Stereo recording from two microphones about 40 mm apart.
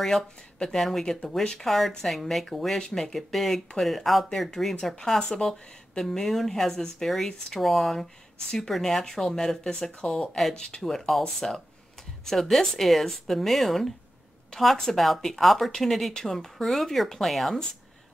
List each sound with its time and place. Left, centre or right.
0.0 s speech: centre
7.6 s speech: centre
10.8 s speech: centre